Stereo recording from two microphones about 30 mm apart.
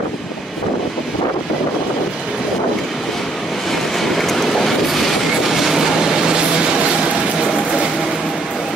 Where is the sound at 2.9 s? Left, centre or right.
Centre.